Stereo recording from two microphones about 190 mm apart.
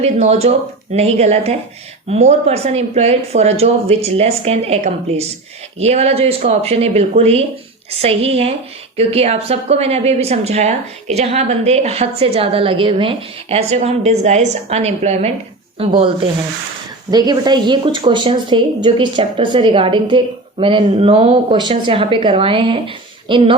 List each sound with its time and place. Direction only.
0.0 s a woman's voice: 35° right (ahead or behind)